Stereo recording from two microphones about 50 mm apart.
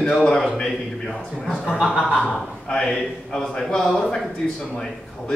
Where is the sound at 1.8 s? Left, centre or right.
Centre.